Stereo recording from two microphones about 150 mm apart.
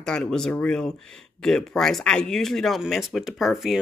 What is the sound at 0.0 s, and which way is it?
Speech, 5° left (ahead or behind).